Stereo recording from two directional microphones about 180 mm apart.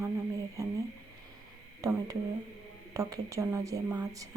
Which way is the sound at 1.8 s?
20° right (ahead or behind).